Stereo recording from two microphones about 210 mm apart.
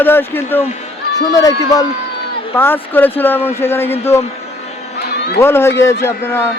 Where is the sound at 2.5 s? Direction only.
10° left (ahead or behind).